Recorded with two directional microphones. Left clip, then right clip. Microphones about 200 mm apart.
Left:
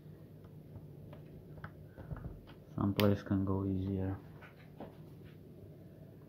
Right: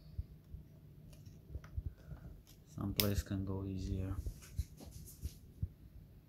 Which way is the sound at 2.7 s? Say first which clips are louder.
Left 6 dB; 5° right (ahead or behind).